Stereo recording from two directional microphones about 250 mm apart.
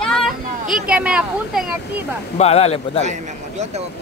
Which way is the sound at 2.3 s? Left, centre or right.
Left.